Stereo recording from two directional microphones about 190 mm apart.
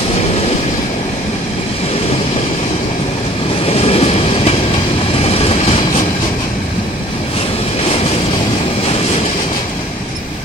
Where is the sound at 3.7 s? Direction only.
30° left (ahead or behind).